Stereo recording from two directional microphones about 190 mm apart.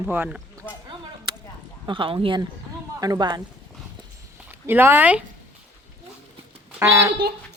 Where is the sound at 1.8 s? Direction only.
25° right (ahead or behind).